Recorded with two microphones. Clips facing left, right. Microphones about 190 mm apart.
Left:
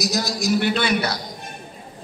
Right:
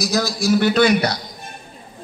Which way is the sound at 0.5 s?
40° right (ahead or behind).